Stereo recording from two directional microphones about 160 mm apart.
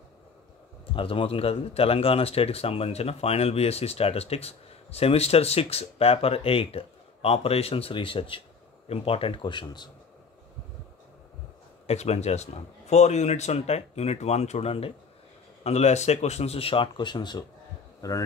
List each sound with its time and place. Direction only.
0.9 s speech: 35° left (ahead or behind)
11.9 s speech: 45° left (ahead or behind); by 18.2 s 20° left (ahead or behind)